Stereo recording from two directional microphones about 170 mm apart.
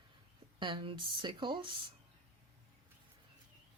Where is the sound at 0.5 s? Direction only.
30° right (ahead or behind).